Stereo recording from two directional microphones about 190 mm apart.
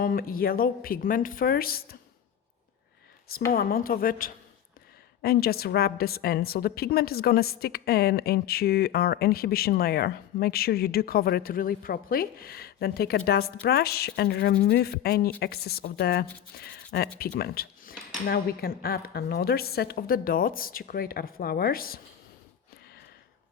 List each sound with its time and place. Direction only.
0.0 s a woman's voice: 50° left (ahead or behind)
3.5 s a woman's voice: 50° left (ahead or behind)